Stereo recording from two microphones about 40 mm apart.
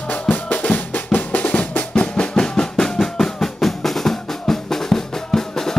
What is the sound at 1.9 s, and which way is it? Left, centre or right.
Drum, left.